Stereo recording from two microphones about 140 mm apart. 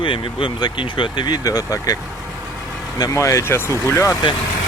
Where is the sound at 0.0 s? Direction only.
40° left (ahead or behind).